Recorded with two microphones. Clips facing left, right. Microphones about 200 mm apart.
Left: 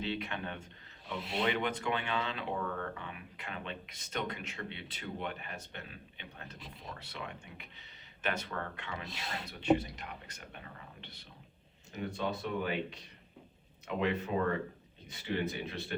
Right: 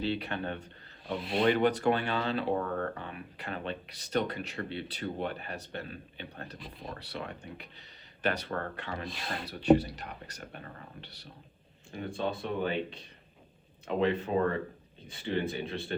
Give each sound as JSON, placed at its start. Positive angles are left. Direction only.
{"t": 0.0, "sound": "speech", "side_deg": -35}
{"t": 9.0, "sound": "speech", "side_deg": 25}
{"t": 9.5, "sound": "speech", "side_deg": -40}
{"t": 12.1, "sound": "speech", "side_deg": -30}